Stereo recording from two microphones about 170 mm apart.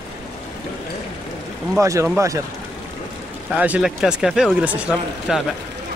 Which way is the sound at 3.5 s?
10° right (ahead or behind).